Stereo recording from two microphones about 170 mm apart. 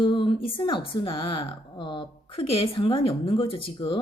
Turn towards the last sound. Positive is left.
turn(degrees=30)  # may be behind; listen again after turning